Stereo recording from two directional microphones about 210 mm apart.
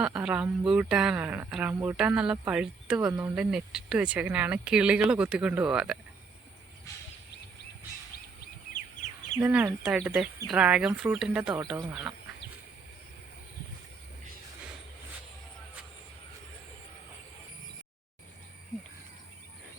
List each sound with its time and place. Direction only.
0.0 s speech: 5° right (ahead or behind)
8.7 s bird: 35° left (ahead or behind)
9.4 s speech: 5° right (ahead or behind)